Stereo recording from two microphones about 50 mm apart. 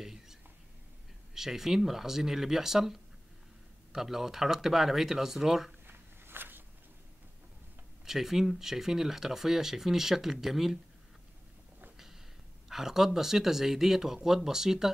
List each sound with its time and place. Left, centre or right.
0.0 s whispering: centre
1.3 s speech: centre
5.9 s a sound: right
8.0 s speech: centre
12.6 s speech: centre